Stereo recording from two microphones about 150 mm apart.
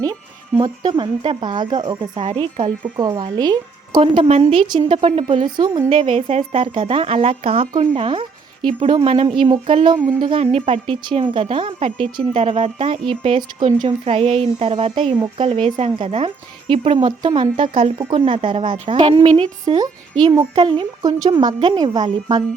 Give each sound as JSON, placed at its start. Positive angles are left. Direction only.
{"t": 0.0, "sound": "speech", "side_deg": -25}
{"t": 19.6, "sound": "speech", "side_deg": -25}